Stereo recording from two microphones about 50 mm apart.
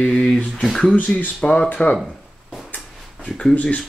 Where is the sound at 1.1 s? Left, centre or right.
Left.